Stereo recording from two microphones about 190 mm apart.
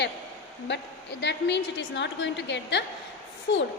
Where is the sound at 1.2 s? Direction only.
65° left (ahead or behind).